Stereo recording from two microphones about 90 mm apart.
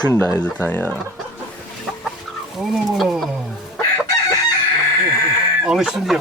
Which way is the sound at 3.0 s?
Centre (ahead or behind).